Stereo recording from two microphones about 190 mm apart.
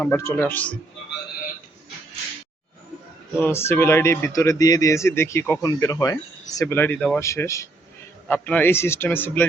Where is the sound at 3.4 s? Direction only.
10° left (ahead or behind).